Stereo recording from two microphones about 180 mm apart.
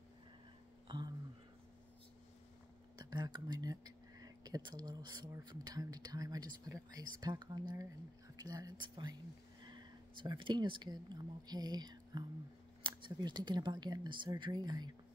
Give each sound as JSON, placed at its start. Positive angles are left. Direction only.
{"t": 0.8, "sound": "speech", "side_deg": -25}
{"t": 3.0, "sound": "speech", "side_deg": -20}